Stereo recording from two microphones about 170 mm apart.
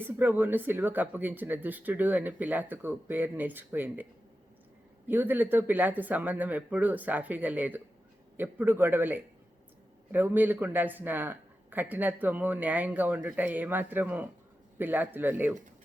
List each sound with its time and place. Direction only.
0.0 s speech: 10° right (ahead or behind)
5.0 s speech: 10° right (ahead or behind)